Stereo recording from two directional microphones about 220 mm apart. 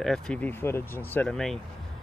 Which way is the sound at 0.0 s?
5° left (ahead or behind).